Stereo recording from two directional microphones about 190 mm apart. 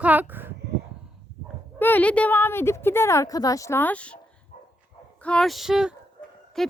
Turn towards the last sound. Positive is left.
turn(degrees=0)  # may be behind; listen again after turning